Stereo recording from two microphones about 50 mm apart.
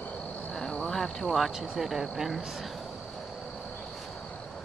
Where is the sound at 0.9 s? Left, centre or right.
Centre.